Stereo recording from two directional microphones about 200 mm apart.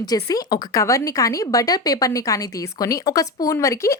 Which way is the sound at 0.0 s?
20° left (ahead or behind).